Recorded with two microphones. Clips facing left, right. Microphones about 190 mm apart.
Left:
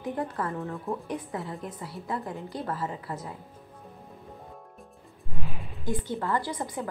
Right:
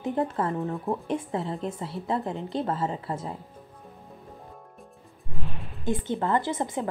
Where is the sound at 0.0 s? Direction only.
25° right (ahead or behind).